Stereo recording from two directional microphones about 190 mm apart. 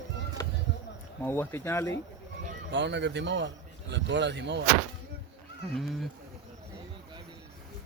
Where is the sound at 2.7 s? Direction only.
65° right (ahead or behind).